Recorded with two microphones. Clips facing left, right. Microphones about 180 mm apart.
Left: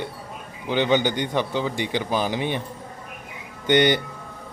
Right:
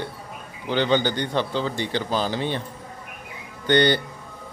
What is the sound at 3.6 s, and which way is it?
Speech, 20° left (ahead or behind).